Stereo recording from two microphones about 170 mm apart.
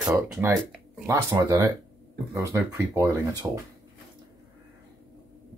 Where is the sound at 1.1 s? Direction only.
15° right (ahead or behind).